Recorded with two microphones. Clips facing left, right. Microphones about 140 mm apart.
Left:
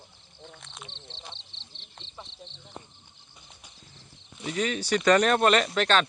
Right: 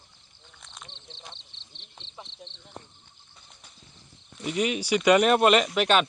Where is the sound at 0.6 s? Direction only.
Centre (ahead or behind).